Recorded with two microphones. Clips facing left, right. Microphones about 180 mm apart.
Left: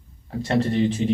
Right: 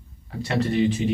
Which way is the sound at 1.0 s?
35° left (ahead or behind).